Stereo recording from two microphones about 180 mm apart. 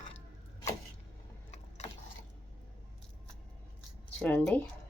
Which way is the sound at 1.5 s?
40° left (ahead or behind).